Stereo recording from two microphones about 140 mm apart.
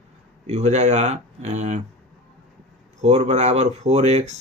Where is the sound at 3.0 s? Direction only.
55° right (ahead or behind).